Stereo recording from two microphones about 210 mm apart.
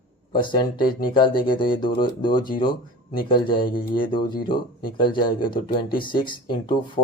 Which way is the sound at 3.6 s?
45° left (ahead or behind).